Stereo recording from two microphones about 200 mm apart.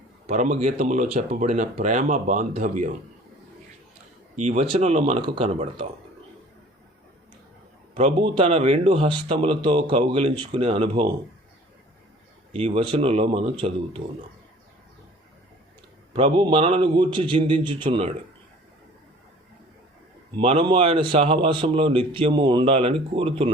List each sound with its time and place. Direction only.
0.3 s speech: 40° right (ahead or behind)
4.4 s a man's voice: 35° right (ahead or behind)
7.9 s a man's voice: 30° right (ahead or behind)
12.5 s a man's voice: 30° right (ahead or behind)
16.1 s a man's voice: 25° right (ahead or behind)
20.3 s a man's voice: 30° right (ahead or behind)